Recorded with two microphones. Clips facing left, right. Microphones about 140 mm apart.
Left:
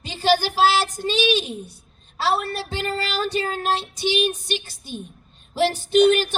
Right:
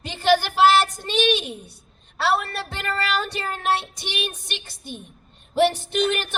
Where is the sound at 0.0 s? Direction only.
60° right (ahead or behind).